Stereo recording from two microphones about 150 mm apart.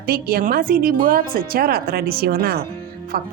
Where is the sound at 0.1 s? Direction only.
85° right.